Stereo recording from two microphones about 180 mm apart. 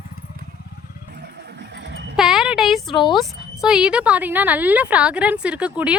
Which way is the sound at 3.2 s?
5° right (ahead or behind).